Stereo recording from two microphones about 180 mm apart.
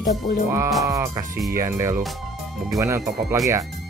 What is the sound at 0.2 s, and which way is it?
Music, 40° left (ahead or behind).